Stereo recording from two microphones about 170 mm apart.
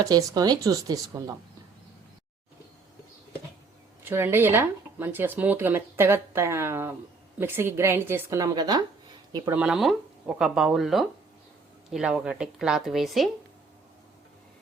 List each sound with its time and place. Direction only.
0.0 s speech: 20° right (ahead or behind)
4.0 s speech: 15° right (ahead or behind)
9.6 s speech: 5° right (ahead or behind)